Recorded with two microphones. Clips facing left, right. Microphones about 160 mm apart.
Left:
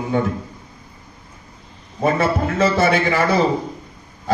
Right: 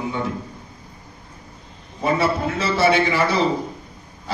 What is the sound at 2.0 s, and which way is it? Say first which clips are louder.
Speech: left 2 dB; 50° left (ahead or behind).